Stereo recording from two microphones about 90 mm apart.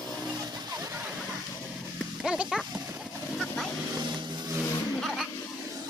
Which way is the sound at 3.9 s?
50° right (ahead or behind).